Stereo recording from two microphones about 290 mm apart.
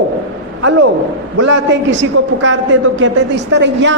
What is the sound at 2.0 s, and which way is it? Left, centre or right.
A man's voice, right.